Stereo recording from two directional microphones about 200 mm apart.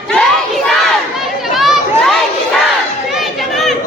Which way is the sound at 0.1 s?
Centre (ahead or behind).